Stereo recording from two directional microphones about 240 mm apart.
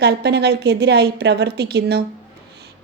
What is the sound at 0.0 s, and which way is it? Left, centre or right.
Speech, right.